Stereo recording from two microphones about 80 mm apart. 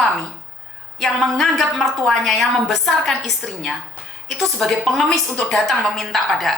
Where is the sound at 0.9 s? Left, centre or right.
Centre.